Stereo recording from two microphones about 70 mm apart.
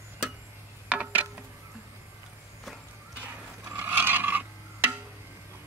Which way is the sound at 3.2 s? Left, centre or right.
Right.